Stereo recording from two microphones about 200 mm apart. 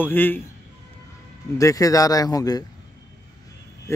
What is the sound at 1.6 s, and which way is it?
Speech, 15° left (ahead or behind).